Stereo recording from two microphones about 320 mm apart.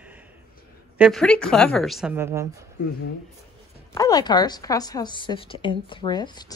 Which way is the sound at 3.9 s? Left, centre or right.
Centre.